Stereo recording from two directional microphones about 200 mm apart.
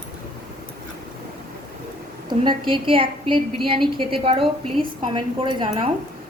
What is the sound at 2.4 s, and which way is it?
A woman's voice, 25° right (ahead or behind).